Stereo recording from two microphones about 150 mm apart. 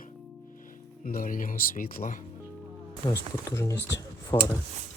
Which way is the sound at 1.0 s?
65° left (ahead or behind).